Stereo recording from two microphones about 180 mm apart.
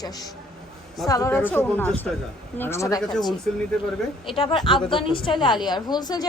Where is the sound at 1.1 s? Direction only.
15° left (ahead or behind).